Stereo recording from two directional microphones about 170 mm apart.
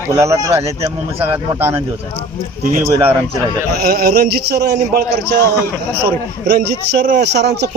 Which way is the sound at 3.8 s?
65° right (ahead or behind).